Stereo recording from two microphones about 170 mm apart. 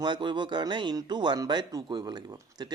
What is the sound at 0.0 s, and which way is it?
Speech, 25° right (ahead or behind).